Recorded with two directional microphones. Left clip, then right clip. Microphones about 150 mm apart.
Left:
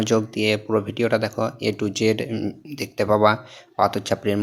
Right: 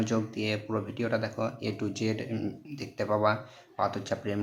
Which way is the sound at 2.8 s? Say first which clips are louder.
Left 10 dB; 45° left (ahead or behind).